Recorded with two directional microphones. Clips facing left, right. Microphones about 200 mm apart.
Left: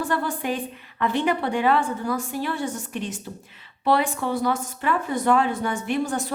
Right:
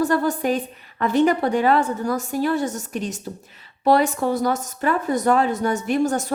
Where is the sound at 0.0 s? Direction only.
40° right (ahead or behind).